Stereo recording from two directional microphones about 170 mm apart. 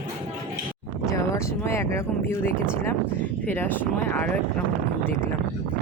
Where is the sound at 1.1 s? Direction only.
15° left (ahead or behind).